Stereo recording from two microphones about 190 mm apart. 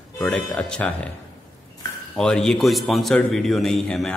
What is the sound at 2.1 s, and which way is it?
A man's voice, 5° left (ahead or behind).